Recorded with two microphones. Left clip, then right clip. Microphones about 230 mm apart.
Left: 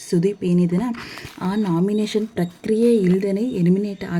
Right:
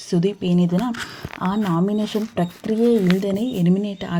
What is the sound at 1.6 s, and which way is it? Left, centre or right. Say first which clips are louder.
Speech: left 4 dB; right.